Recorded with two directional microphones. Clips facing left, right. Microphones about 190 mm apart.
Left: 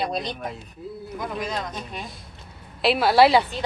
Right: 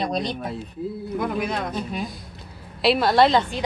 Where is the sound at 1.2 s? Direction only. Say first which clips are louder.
Right 4 dB; 60° right (ahead or behind).